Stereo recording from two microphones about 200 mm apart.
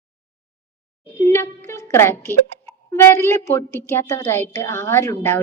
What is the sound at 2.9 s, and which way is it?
A woman's voice, 15° left (ahead or behind).